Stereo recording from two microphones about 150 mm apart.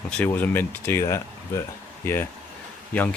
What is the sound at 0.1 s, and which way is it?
Speech, 10° left (ahead or behind).